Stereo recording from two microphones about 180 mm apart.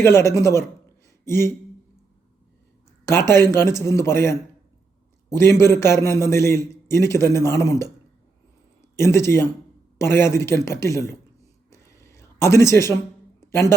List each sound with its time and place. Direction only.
0.0 s a man's voice: 15° left (ahead or behind)
1.2 s a sound: 15° left (ahead or behind)
3.1 s a man's voice: 15° left (ahead or behind)
9.0 s a man's voice: 15° left (ahead or behind)
11.7 s a sound: 15° left (ahead or behind)
13.5 s speech: 15° left (ahead or behind)